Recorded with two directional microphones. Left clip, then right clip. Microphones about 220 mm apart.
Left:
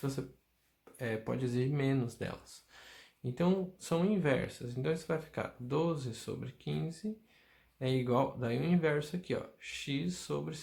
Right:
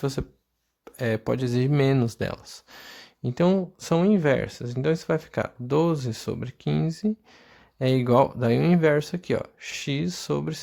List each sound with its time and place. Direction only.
0.0 s speech: 50° right (ahead or behind)